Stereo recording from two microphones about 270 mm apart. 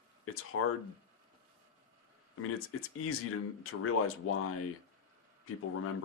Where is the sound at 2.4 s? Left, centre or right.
Left.